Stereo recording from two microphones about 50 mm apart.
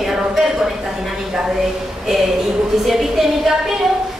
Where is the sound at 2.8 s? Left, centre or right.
Centre.